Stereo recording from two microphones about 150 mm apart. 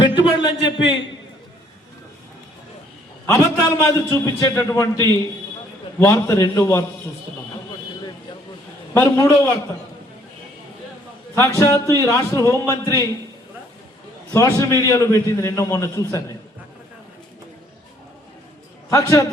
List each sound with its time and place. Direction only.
0.0 s speech: 35° left (ahead or behind)
3.2 s a man's voice: 20° left (ahead or behind)
9.0 s a man's voice: 20° left (ahead or behind)
11.3 s a man's voice: 20° left (ahead or behind)
14.3 s a man's voice: 20° left (ahead or behind)
18.9 s a man's voice: 20° left (ahead or behind)